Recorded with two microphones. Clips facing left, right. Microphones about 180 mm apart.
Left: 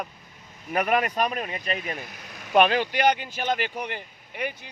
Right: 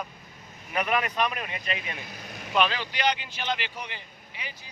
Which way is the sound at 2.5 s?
55° left (ahead or behind).